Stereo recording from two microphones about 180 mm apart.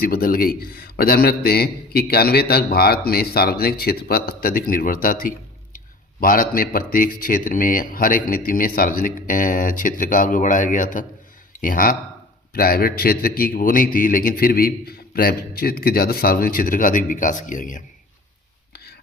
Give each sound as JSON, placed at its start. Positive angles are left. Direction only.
{"t": 0.0, "sound": "a man's voice", "side_deg": 55}